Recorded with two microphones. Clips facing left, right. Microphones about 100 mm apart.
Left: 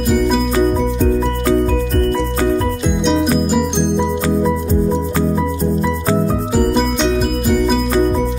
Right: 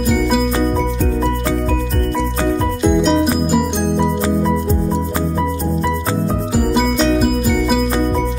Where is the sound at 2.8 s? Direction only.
5° right (ahead or behind).